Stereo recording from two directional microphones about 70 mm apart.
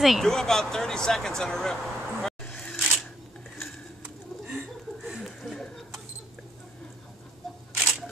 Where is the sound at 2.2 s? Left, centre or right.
Centre.